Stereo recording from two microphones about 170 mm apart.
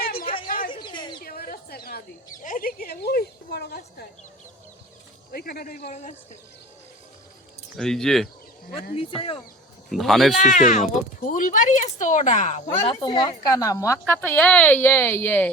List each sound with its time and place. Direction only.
0.0 s a sound: 60° left (ahead or behind)
0.7 s a sound: 25° left (ahead or behind)
1.2 s a sound: 60° left (ahead or behind)
5.3 s speech: 65° left (ahead or behind)
5.9 s speech: 45° left (ahead or behind)
7.8 s speech: 5° left (ahead or behind)
9.0 s speech: 35° left (ahead or behind)
9.9 s speech: centre (ahead or behind)
10.3 s speech: 50° left (ahead or behind)
12.6 s a woman's voice: 15° left (ahead or behind)
12.9 s a woman's voice: 30° left (ahead or behind); by 15.4 s 10° left (ahead or behind)